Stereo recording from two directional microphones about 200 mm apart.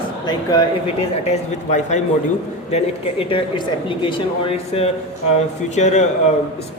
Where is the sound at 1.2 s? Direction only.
35° left (ahead or behind).